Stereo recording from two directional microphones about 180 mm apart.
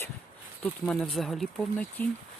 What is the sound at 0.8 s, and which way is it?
Speech, 5° left (ahead or behind).